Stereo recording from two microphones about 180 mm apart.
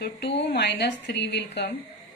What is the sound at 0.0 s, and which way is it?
A woman's voice, 70° left (ahead or behind).